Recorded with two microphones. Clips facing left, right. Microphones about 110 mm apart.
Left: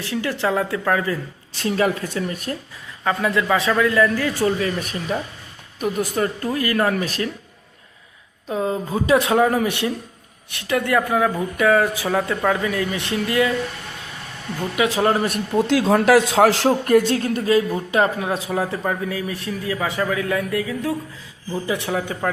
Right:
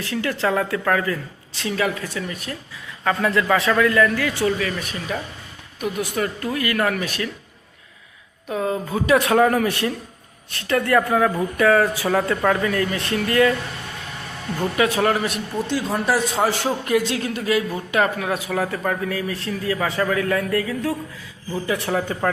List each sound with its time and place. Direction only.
0.0 s speech: 20° left (ahead or behind)
1.5 s speech: 40° left (ahead or behind)
3.0 s speech: 10° left (ahead or behind)
4.4 s speech: 35° left (ahead or behind)
4.8 s speech: 45° left (ahead or behind)
6.1 s speech: 30° left (ahead or behind)
8.4 s speech: 25° left (ahead or behind)
14.8 s speech: 25° left (ahead or behind)
15.1 s speech: 40° left (ahead or behind)
15.9 s a man's voice: 90° left
16.6 s speech: 50° left (ahead or behind)
17.7 s speech: 25° left (ahead or behind)
22.2 s speech: centre (ahead or behind)